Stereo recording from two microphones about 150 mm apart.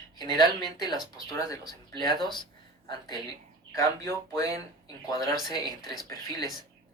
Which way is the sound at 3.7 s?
20° left (ahead or behind).